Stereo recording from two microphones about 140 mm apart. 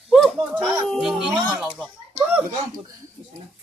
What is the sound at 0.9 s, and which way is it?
Speech, centre (ahead or behind).